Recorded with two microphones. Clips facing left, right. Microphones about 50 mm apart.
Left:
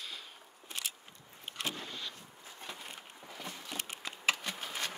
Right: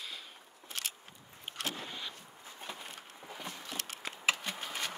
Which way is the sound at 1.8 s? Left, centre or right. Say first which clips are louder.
Right 1 dB; centre.